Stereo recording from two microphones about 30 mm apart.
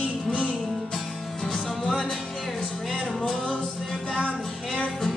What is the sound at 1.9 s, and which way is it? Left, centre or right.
Music, left.